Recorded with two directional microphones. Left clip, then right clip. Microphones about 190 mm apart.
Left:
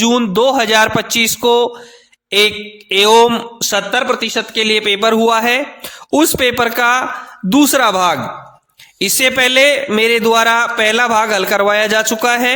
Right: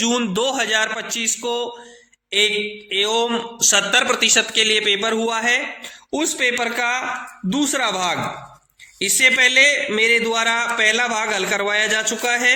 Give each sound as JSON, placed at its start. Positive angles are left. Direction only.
{"t": 0.0, "sound": "a man's voice", "side_deg": 40}
{"t": 2.9, "sound": "a man's voice", "side_deg": 50}
{"t": 4.6, "sound": "a man's voice", "side_deg": 45}